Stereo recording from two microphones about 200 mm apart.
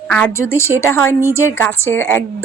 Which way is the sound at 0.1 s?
5° left (ahead or behind).